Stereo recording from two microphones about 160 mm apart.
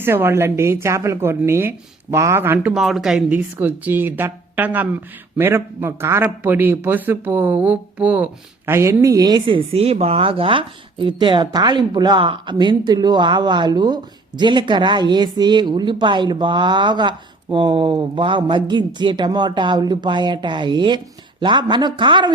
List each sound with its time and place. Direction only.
0.0 s a woman's voice: 15° right (ahead or behind)
2.7 s a woman's voice: centre (ahead or behind); by 22.3 s 30° right (ahead or behind)